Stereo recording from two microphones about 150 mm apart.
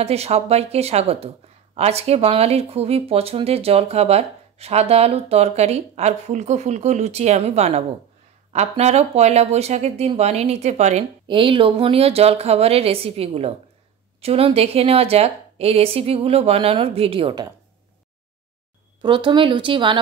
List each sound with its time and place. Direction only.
0.0 s speech: 45° right (ahead or behind)
11.2 s a woman's voice: 35° right (ahead or behind)
18.9 s a woman's voice: 35° right (ahead or behind)